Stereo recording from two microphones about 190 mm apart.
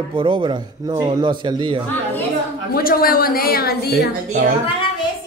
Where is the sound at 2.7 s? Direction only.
50° left (ahead or behind).